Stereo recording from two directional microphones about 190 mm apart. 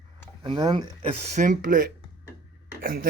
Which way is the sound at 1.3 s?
40° right (ahead or behind).